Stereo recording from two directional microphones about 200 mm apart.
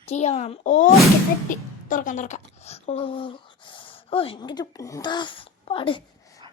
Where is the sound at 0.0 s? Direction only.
35° left (ahead or behind).